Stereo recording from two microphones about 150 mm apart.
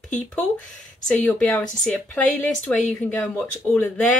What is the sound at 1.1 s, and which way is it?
Speech, centre (ahead or behind).